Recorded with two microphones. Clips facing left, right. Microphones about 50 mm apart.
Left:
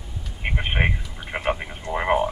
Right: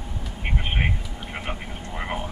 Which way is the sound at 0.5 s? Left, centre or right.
Left.